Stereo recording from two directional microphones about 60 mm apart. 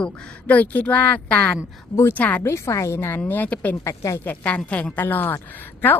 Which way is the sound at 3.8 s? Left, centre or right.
Left.